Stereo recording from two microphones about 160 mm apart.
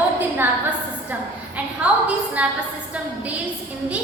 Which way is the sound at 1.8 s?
10° right (ahead or behind).